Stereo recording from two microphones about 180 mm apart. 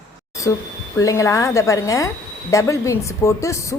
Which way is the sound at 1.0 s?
15° left (ahead or behind).